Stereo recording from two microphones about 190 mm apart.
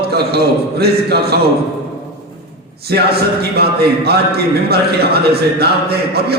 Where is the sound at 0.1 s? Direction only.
55° right (ahead or behind).